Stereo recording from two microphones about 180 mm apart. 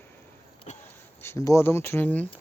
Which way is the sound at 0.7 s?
40° left (ahead or behind).